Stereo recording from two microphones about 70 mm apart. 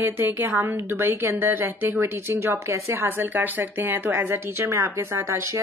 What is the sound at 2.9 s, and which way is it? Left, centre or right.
A woman's voice, right.